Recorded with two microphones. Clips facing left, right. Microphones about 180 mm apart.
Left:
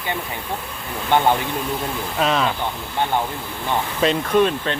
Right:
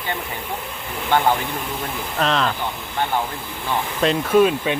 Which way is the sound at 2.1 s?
5° left (ahead or behind).